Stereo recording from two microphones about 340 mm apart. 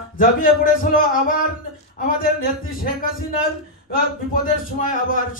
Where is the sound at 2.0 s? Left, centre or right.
Left.